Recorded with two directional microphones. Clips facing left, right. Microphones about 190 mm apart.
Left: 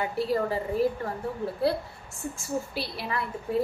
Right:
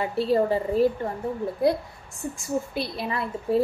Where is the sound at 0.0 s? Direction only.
25° right (ahead or behind).